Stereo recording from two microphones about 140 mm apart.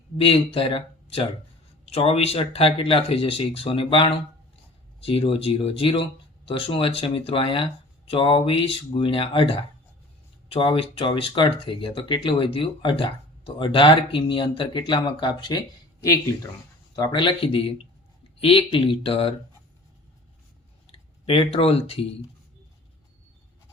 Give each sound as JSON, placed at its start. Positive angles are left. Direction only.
{"t": 0.2, "sound": "speech", "side_deg": 40}
{"t": 21.2, "sound": "speech", "side_deg": 45}